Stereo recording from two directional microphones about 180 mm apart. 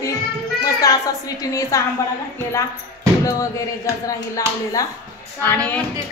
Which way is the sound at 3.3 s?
20° left (ahead or behind).